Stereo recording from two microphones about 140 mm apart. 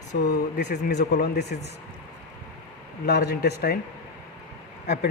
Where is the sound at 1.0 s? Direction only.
90° left.